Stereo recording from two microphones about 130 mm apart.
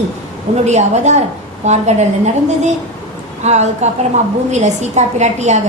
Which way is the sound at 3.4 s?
60° right (ahead or behind).